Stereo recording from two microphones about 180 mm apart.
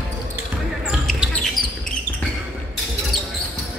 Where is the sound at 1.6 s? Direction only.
25° right (ahead or behind).